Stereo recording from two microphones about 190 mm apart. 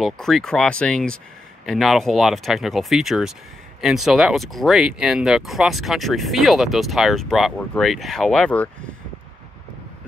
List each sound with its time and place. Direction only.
0.0 s speech: centre (ahead or behind)